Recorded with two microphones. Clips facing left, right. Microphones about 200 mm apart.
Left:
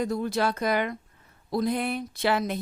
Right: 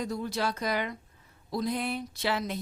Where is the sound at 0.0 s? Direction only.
55° left (ahead or behind).